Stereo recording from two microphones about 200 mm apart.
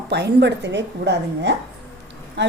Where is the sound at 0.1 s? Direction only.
55° right (ahead or behind).